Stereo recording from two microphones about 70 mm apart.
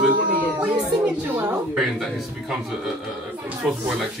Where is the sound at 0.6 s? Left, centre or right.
Right.